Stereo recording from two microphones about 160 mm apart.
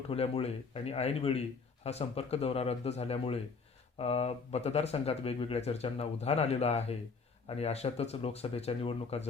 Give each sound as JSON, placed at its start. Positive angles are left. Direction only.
{"t": 0.1, "sound": "a man's voice", "side_deg": 40}